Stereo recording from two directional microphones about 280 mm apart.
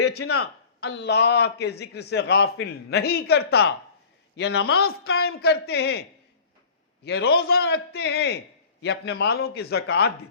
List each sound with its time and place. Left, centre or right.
0.3 s a man's voice: left